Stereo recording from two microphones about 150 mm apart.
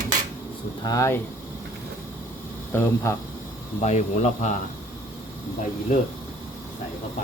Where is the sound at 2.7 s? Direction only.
15° left (ahead or behind).